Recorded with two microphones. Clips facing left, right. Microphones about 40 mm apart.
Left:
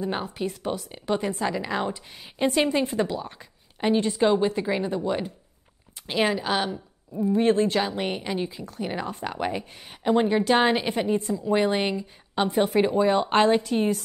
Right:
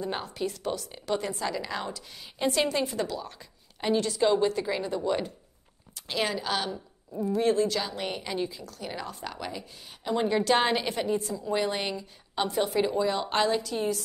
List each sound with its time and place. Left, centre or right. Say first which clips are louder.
0.0 s a woman's voice: left 3 dB; centre
7.4 s a woman's voice: left 3 dB; left
10.2 s a woman's voice: even; centre; by 14.0 s left